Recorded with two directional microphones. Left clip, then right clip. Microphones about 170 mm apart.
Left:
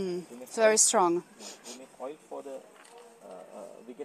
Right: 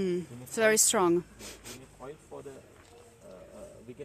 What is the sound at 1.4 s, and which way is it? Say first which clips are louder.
Speech: left 1 dB; 45° right (ahead or behind).